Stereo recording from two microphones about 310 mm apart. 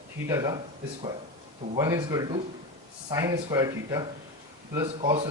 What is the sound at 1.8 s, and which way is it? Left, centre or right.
Speech, centre.